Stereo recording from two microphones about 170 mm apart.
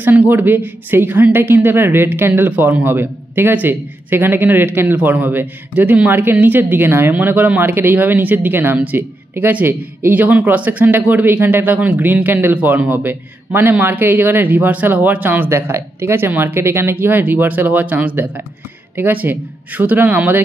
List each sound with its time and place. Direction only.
0.0 s a man's voice: 10° right (ahead or behind)